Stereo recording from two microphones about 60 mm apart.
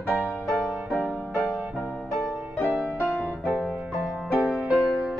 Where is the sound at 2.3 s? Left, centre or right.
Right.